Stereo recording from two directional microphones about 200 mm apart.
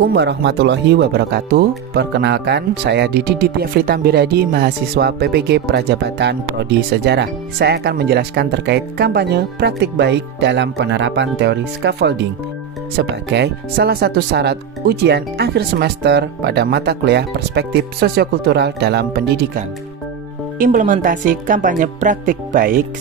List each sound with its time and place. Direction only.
0.1 s speech: 55° right (ahead or behind)
20.5 s speech: 40° right (ahead or behind)